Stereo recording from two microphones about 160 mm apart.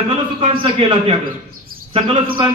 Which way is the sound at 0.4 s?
35° right (ahead or behind).